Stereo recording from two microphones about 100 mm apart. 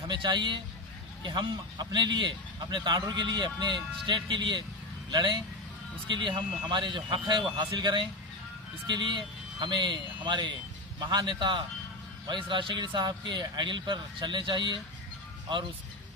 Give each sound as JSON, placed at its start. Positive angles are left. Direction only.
{"t": 0.1, "sound": "speech", "side_deg": -50}